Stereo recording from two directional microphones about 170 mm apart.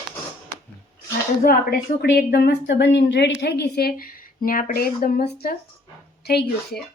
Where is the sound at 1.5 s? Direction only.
65° left (ahead or behind); by 3.3 s 90° left.